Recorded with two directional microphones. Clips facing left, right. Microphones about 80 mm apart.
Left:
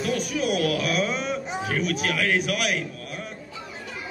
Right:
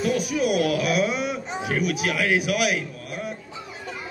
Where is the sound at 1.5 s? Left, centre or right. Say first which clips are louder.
Right 2 dB; centre.